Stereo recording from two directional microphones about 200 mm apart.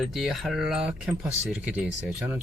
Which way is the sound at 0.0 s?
Centre (ahead or behind).